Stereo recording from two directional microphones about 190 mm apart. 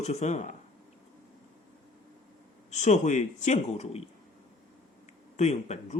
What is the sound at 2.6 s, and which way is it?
Speech, 40° left (ahead or behind).